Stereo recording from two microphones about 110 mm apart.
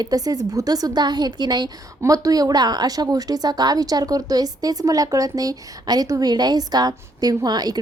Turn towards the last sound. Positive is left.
turn(degrees=-35)  # may be behind; listen again after turning